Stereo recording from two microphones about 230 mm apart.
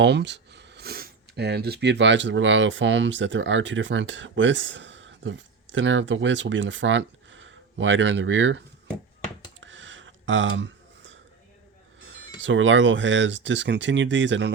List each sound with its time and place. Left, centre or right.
0.0 s speech: right
9.6 s a sound: right
12.4 s speech: right